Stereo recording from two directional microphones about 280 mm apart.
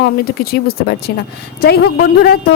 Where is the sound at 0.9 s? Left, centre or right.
Left.